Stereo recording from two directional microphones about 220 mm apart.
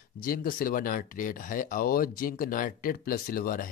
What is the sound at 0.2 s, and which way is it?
Speech, 40° left (ahead or behind).